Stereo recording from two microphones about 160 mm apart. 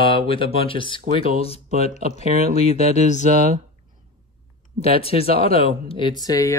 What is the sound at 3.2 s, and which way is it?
Speech, 55° right (ahead or behind).